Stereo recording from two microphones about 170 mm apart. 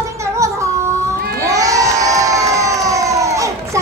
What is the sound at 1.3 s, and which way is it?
Crowd, 20° right (ahead or behind).